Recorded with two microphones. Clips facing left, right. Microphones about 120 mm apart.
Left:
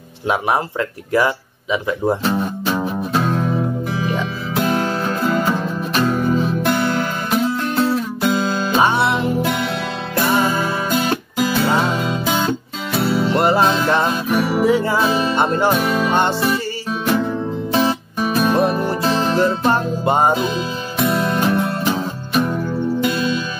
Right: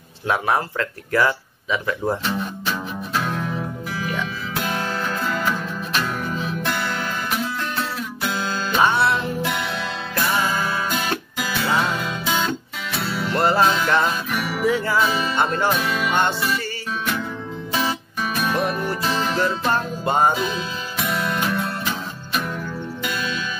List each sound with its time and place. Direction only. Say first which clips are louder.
0.3 s speech: left 3 dB; 20° left (ahead or behind)
2.2 s music: left 6 dB; 30° left (ahead or behind)
15.8 s music: left 5 dB; 40° left (ahead or behind)
16.2 s speech: left 4 dB; 30° left (ahead or behind)
17.0 s music: left 10 dB; 35° left (ahead or behind)